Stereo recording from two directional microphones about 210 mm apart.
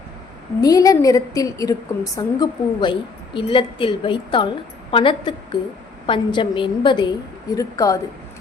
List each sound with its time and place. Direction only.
0.6 s a woman's voice: 15° left (ahead or behind)